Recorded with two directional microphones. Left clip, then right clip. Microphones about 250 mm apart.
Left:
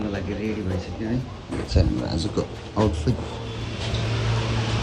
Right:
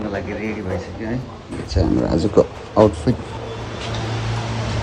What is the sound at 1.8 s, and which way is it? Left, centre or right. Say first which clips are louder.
Speech: right 5 dB; centre.